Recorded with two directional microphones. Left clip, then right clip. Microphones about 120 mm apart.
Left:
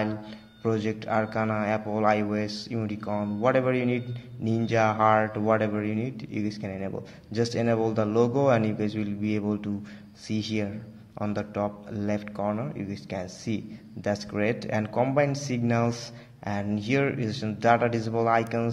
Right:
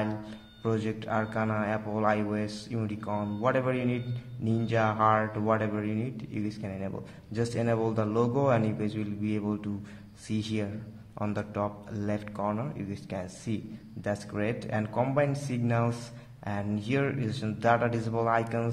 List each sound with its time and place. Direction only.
0.7 s speech: 15° left (ahead or behind)